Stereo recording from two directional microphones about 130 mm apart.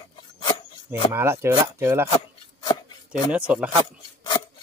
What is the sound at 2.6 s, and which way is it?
Chopping, 35° left (ahead or behind).